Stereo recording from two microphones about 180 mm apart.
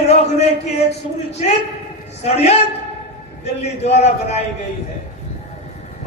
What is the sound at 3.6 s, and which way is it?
Speech, 35° left (ahead or behind).